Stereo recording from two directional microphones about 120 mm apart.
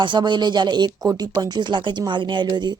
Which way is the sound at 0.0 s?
40° right (ahead or behind).